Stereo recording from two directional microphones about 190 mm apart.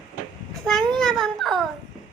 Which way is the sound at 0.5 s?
Centre (ahead or behind).